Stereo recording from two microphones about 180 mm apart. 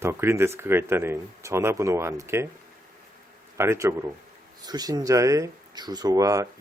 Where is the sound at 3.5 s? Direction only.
15° right (ahead or behind).